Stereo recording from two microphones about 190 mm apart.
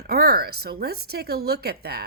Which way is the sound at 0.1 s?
55° right (ahead or behind).